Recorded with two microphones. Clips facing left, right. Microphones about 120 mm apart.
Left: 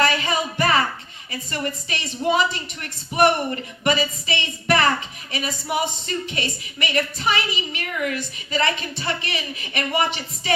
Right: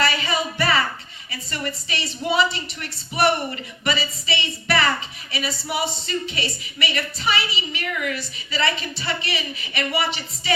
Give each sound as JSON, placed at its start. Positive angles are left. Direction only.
{"t": 0.0, "sound": "music", "side_deg": 50}
{"t": 1.3, "sound": "a woman's voice", "side_deg": 45}